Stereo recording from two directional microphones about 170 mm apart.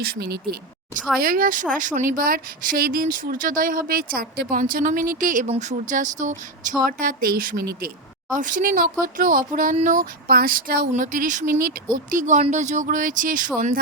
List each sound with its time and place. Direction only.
0.0 s speech: 70° right (ahead or behind)
1.2 s speech: 55° right (ahead or behind)
8.3 s speech: 50° right (ahead or behind)